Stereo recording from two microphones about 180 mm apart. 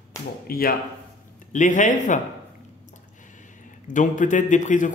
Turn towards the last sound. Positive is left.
turn(degrees=45)  # may be behind; listen again after turning